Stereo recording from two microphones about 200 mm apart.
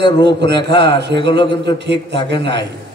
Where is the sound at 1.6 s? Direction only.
60° right (ahead or behind).